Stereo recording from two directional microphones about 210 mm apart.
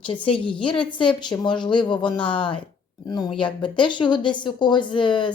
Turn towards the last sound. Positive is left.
turn(degrees=20)  # may be behind; listen again after turning